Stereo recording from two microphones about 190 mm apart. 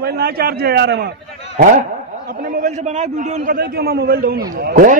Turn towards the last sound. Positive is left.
turn(degrees=-50)  # may be behind; listen again after turning